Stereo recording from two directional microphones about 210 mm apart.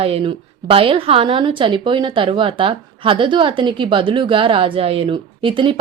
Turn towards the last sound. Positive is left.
turn(degrees=-25)  # may be behind; listen again after turning